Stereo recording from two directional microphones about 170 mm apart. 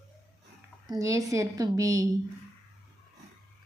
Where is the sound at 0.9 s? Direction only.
20° right (ahead or behind).